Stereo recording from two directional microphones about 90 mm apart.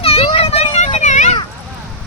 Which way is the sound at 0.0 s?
90° left.